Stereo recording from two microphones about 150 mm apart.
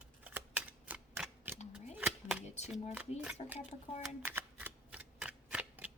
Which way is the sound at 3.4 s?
40° left (ahead or behind).